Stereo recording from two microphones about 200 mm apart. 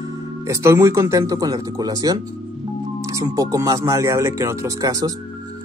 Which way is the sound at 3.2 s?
15° right (ahead or behind).